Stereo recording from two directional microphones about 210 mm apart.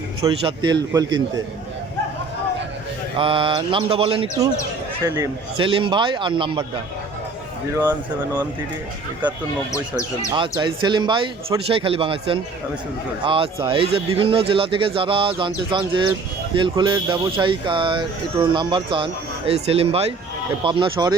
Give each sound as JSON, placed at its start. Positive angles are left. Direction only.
{"t": 0.2, "sound": "speech", "side_deg": -20}
{"t": 3.2, "sound": "speech", "side_deg": -25}
{"t": 7.7, "sound": "speech", "side_deg": -15}
{"t": 10.3, "sound": "speech", "side_deg": -20}